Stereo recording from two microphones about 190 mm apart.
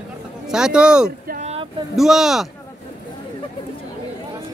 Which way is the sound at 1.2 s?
45° right (ahead or behind).